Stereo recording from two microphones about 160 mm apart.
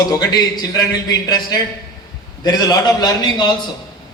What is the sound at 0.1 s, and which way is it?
Speech, 25° left (ahead or behind).